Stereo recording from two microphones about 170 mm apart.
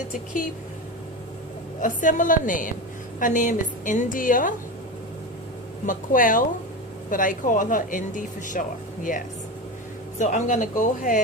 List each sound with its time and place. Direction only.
1.8 s speech: 50° left (ahead or behind)
5.8 s speech: 50° left (ahead or behind)
10.2 s speech: 45° left (ahead or behind)